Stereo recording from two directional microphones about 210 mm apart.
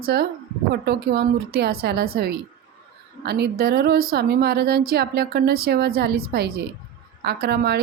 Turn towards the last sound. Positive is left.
turn(degrees=-50)  # may be behind; listen again after turning